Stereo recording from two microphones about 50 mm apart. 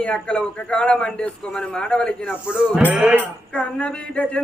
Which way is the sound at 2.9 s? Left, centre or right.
Right.